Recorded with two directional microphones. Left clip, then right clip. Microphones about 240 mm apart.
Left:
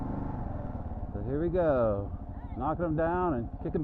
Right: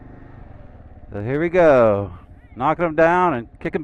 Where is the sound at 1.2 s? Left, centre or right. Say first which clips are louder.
Right 13 dB; right.